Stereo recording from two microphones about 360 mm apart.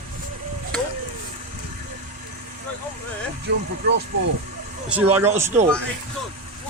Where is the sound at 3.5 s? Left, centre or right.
Right.